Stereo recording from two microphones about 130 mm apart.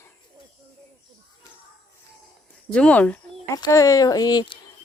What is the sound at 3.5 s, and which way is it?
Speech, 25° left (ahead or behind).